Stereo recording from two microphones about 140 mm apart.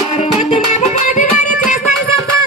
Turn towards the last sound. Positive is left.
turn(degrees=60)  # may be behind; listen again after turning